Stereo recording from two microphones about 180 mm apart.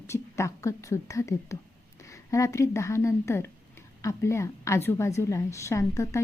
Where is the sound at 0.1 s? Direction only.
15° left (ahead or behind).